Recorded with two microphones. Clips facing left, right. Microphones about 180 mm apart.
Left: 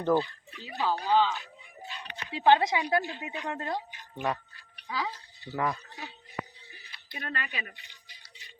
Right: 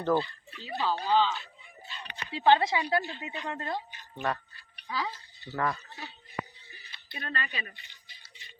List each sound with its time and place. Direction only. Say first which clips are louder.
0.0 s speech: left 1 dB; 10° left (ahead or behind)
4.9 s speech: even; 10° left (ahead or behind)
7.1 s speech: even; 10° left (ahead or behind)